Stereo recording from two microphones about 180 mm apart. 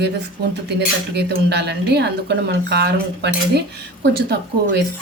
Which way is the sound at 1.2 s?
70° right (ahead or behind).